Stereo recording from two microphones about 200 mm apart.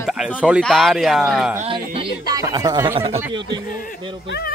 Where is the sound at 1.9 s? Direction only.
20° right (ahead or behind).